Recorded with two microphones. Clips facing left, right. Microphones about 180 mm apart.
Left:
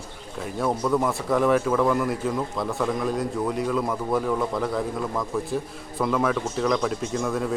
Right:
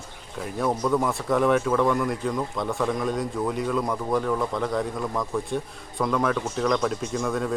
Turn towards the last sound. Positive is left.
turn(degrees=0)  # may be behind; listen again after turning